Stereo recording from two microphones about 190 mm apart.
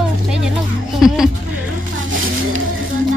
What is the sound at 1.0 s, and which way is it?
Music, centre (ahead or behind).